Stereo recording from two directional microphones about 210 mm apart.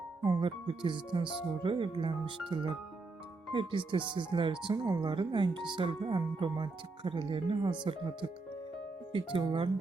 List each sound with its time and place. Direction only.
0.3 s speech: 20° right (ahead or behind)
3.5 s speech: 25° right (ahead or behind)
9.1 s speech: 25° right (ahead or behind)